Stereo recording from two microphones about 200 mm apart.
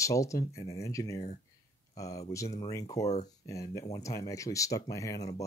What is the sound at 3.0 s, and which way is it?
Speech, 35° left (ahead or behind).